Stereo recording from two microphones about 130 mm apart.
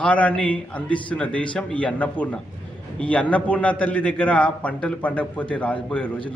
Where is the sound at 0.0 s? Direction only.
10° left (ahead or behind).